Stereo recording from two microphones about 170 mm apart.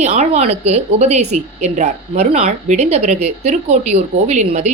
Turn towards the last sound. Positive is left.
turn(degrees=-40)  # may be behind; listen again after turning